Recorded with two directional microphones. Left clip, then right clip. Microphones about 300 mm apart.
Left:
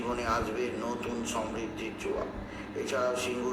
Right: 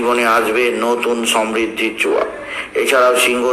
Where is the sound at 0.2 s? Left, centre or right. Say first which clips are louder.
Right 17 dB; right.